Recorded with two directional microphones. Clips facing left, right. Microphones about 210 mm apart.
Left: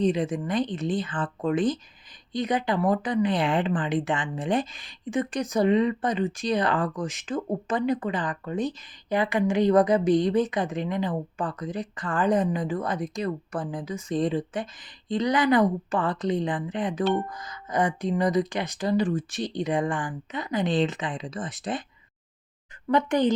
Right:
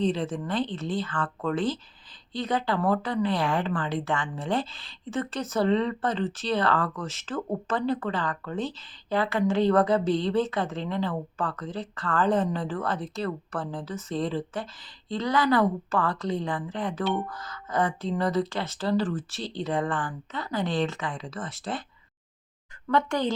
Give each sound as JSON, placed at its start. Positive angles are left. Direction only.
{"t": 0.0, "sound": "speech", "side_deg": 15}
{"t": 22.9, "sound": "speech", "side_deg": 20}